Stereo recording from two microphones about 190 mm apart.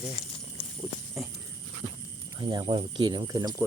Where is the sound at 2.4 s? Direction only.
25° right (ahead or behind).